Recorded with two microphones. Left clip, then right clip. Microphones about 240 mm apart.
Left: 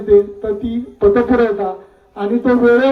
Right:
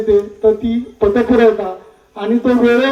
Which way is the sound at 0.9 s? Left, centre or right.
Right.